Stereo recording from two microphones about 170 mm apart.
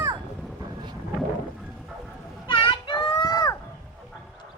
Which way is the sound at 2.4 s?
30° left (ahead or behind).